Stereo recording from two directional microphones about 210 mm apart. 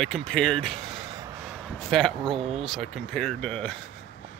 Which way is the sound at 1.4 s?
Centre (ahead or behind).